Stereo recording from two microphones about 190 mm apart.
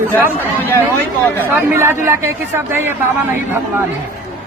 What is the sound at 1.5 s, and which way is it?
Speech, 10° right (ahead or behind).